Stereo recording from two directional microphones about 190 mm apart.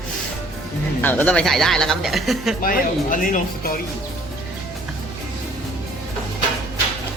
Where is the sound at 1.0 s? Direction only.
10° left (ahead or behind).